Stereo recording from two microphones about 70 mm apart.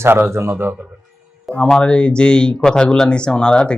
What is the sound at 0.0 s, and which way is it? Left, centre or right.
Speech, right.